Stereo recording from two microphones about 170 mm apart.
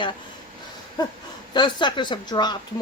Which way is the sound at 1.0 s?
25° left (ahead or behind).